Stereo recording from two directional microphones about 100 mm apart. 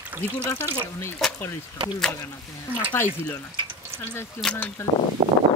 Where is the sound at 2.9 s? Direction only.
25° left (ahead or behind).